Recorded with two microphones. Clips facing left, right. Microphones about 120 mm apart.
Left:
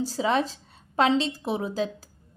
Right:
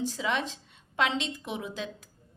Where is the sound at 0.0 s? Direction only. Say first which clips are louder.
Left 6 dB; 35° left (ahead or behind).